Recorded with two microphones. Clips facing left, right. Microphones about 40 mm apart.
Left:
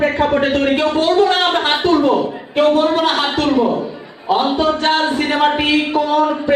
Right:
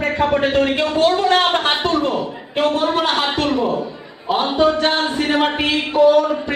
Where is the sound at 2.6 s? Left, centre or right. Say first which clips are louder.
Left 4 dB; centre.